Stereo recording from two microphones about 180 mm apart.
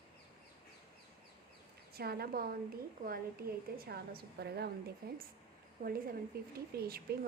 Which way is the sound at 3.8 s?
60° right (ahead or behind).